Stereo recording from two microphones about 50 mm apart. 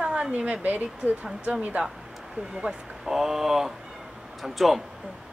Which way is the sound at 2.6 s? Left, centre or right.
Centre.